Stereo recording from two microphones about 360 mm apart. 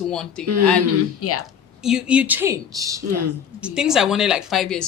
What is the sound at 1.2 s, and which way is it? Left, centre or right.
Speech, left.